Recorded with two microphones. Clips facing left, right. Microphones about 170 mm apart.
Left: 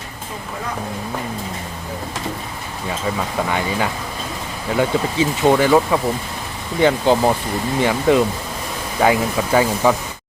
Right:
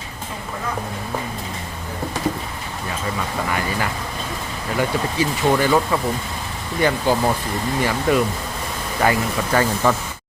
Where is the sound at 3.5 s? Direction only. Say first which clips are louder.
Left 3 dB; 20° left (ahead or behind).